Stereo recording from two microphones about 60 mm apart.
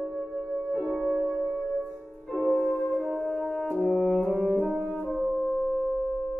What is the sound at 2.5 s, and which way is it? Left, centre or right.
Music, left.